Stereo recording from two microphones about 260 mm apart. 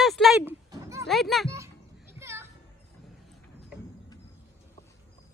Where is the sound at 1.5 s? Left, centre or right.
Centre.